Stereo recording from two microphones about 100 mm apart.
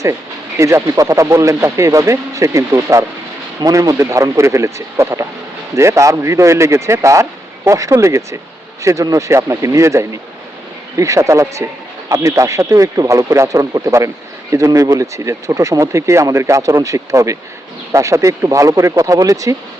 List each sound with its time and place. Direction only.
0.6 s speech: 30° right (ahead or behind)